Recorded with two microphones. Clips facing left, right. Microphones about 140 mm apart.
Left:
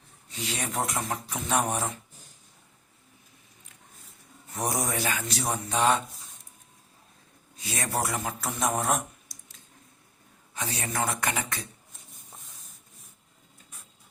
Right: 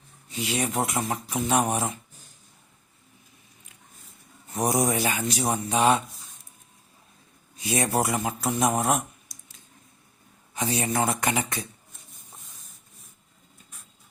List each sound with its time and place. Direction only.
0.3 s speech: 5° right (ahead or behind)
4.5 s speech: 15° right (ahead or behind)
7.5 s a man's voice: 15° right (ahead or behind)